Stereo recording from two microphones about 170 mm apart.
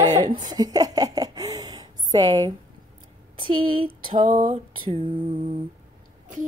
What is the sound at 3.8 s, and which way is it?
Female singing, 30° right (ahead or behind).